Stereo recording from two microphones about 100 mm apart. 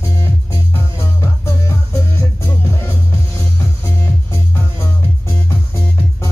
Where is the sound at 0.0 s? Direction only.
30° left (ahead or behind).